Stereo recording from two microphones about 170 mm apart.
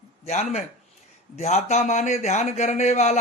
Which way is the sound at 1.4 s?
40° left (ahead or behind).